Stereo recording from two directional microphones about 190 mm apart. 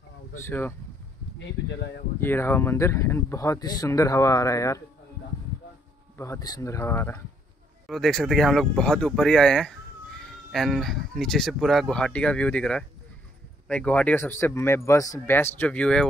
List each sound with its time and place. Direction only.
0.4 s speech: 10° left (ahead or behind)
2.1 s speech: 10° left (ahead or behind)
6.1 s speech: 15° left (ahead or behind)
7.8 s speech: centre (ahead or behind)